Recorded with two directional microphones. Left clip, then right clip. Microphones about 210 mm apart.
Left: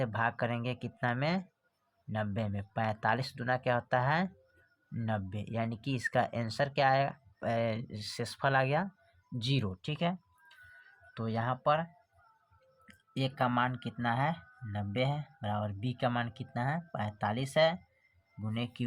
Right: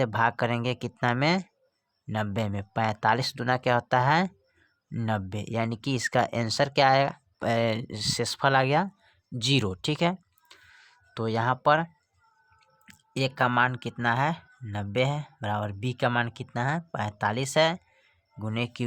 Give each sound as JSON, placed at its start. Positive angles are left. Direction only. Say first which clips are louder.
{"t": 0.0, "sound": "speech", "louder": "right 7 dB", "side_deg": -35}